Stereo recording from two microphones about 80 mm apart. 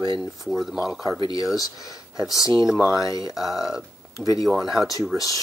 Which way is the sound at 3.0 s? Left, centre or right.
Left.